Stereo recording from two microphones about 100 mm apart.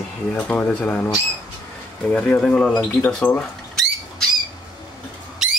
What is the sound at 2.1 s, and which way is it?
Speech, 15° left (ahead or behind).